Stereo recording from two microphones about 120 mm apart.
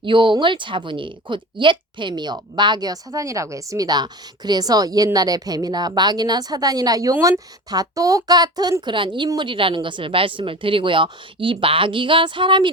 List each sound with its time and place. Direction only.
0.0 s a woman's voice: 45° right (ahead or behind)